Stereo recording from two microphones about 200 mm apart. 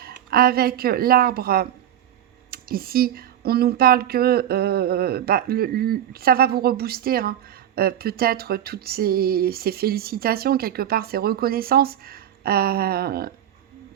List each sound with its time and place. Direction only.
0.0 s speech: 50° right (ahead or behind)